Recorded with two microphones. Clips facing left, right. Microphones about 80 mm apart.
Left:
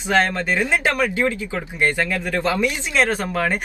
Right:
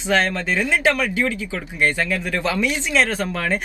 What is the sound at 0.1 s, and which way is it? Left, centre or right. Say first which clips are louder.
Speech: left 1 dB; left.